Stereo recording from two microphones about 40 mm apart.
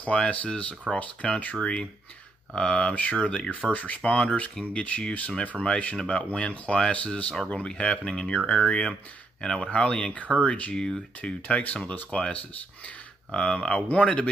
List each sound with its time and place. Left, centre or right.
0.0 s speech: left
13.3 s speech: left